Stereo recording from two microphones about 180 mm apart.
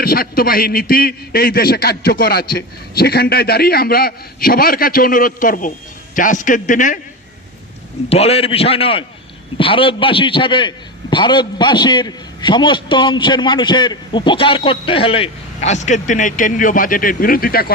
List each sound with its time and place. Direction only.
0.0 s a man's voice: 55° left (ahead or behind)
8.1 s a man's voice: 35° left (ahead or behind); by 17.7 s 55° left (ahead or behind)